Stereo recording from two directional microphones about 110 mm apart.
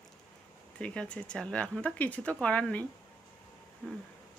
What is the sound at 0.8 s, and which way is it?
Speech, 10° left (ahead or behind).